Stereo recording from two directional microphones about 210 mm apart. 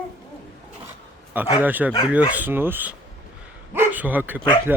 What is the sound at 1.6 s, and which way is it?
Speech, 10° right (ahead or behind).